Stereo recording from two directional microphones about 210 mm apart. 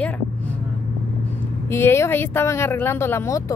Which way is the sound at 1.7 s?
10° left (ahead or behind).